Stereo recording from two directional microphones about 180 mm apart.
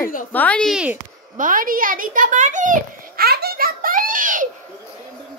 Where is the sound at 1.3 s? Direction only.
50° right (ahead or behind).